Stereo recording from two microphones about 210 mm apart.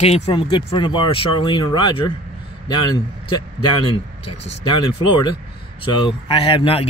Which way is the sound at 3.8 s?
25° left (ahead or behind).